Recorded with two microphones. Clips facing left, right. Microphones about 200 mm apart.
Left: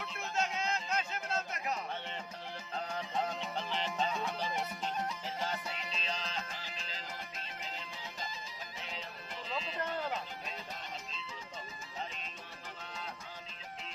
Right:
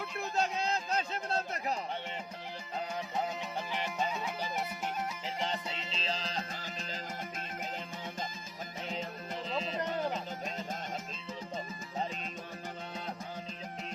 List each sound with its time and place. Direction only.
0.3 s a sound: 35° right (ahead or behind)
2.9 s music: 10° right (ahead or behind)
5.4 s music: 25° right (ahead or behind); by 7.0 s 45° right (ahead or behind)
8.9 s music: 45° right (ahead or behind)